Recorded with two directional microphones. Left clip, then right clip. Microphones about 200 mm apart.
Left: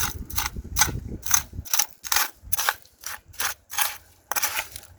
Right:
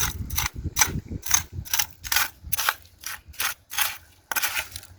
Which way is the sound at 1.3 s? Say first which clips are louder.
Even; 15° left (ahead or behind).